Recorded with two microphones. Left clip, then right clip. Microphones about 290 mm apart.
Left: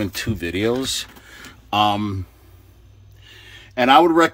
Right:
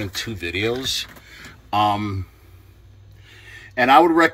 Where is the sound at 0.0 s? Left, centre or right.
Centre.